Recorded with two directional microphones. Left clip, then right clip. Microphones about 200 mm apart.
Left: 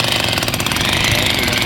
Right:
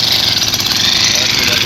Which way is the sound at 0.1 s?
10° left (ahead or behind).